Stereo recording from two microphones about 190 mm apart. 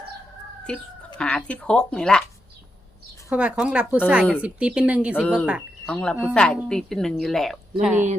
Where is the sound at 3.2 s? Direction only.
5° right (ahead or behind).